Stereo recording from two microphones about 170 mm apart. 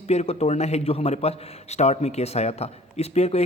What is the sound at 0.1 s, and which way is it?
A man's voice, 40° left (ahead or behind).